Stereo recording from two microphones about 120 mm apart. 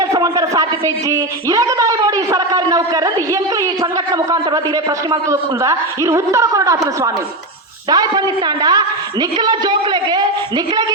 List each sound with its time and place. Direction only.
0.1 s a sound: 30° right (ahead or behind)
1.1 s a man's voice: 25° right (ahead or behind)
5.3 s a woman's voice: 25° right (ahead or behind)